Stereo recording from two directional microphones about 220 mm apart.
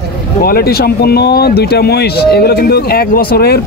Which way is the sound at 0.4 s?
45° left (ahead or behind).